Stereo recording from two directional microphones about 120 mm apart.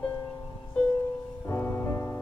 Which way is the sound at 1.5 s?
20° left (ahead or behind).